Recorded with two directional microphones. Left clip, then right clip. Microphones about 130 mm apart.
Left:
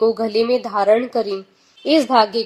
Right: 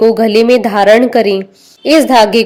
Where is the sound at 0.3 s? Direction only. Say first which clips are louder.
Right 10 dB; 15° right (ahead or behind).